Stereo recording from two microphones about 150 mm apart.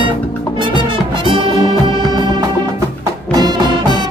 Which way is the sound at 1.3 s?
35° right (ahead or behind).